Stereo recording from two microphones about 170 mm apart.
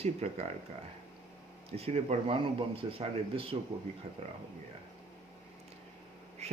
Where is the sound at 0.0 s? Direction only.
40° right (ahead or behind).